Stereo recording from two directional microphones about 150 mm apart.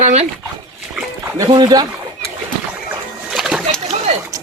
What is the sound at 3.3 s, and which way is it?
Rowboat, centre (ahead or behind).